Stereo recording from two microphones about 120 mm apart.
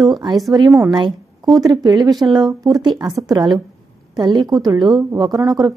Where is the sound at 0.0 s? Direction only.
Centre (ahead or behind).